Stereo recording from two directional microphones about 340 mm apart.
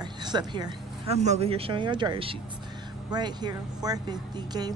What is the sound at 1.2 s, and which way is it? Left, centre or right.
Speech, centre.